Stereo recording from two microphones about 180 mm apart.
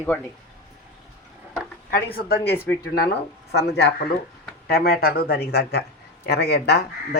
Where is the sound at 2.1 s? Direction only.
60° left (ahead or behind).